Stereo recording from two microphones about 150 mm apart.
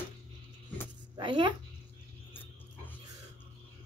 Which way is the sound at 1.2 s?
30° right (ahead or behind).